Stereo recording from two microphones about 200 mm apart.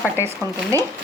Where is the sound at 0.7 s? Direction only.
15° right (ahead or behind).